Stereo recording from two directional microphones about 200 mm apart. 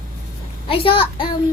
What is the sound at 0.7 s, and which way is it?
Speech, 25° left (ahead or behind).